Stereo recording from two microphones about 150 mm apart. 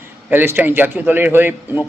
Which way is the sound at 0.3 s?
10° right (ahead or behind).